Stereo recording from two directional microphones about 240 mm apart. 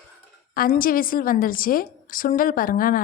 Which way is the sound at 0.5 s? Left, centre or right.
Left.